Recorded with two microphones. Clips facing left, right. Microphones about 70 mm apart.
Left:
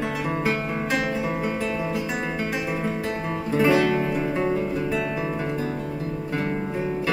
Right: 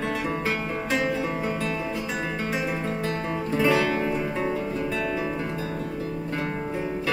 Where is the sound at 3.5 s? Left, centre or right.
Centre.